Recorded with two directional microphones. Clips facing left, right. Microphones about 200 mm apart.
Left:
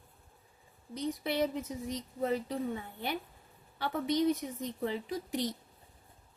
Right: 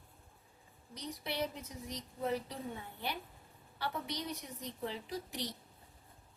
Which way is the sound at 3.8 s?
50° left (ahead or behind).